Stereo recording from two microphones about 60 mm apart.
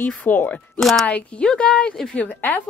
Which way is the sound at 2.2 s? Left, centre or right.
Left.